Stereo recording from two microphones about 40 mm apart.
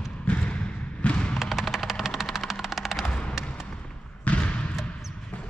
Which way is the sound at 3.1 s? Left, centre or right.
Left.